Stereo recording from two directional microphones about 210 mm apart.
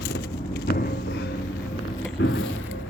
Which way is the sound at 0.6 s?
50° left (ahead or behind).